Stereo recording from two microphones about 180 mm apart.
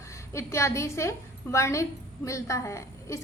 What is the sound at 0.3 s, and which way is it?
A woman's voice, 15° left (ahead or behind).